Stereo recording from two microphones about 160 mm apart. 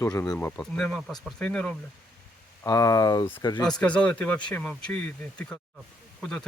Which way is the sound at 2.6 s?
20° left (ahead or behind).